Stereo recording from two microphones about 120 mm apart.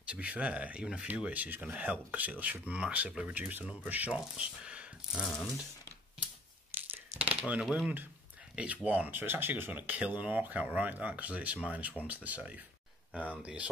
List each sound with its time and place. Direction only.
0.1 s speech: 10° right (ahead or behind)
6.7 s a sound: 15° right (ahead or behind)
7.6 s speech: 5° right (ahead or behind)